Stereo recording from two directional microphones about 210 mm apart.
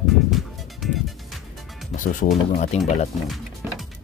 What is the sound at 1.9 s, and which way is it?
Speech, 40° left (ahead or behind).